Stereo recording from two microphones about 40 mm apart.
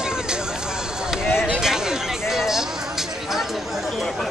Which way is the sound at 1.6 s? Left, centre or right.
Centre.